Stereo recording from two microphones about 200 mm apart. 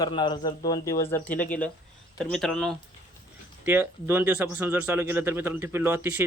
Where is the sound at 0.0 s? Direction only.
20° left (ahead or behind); by 2.7 s centre (ahead or behind).